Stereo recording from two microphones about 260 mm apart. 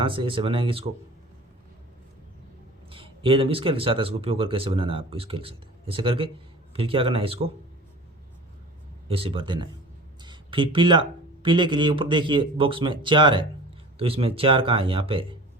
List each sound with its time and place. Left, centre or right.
0.0 s speech: centre
2.9 s speech: right
9.0 s speech: right
10.2 s a sound: centre
11.4 s speech: centre